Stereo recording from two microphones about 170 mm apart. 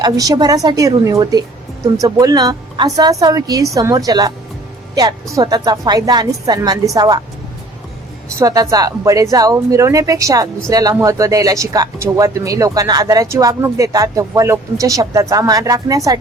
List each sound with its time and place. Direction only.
0.0 s speech: 25° right (ahead or behind)
5.3 s speech: 20° right (ahead or behind)
8.4 s speech: 20° right (ahead or behind)